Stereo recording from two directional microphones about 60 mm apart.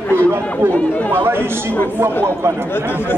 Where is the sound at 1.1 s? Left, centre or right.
Right.